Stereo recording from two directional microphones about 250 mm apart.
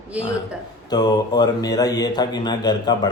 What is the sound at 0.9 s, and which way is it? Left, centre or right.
Speech, centre.